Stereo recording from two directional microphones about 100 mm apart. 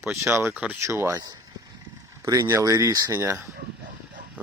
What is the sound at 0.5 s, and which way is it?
Speech, 15° right (ahead or behind).